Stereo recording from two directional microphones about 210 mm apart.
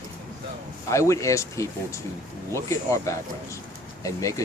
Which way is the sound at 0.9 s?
15° left (ahead or behind).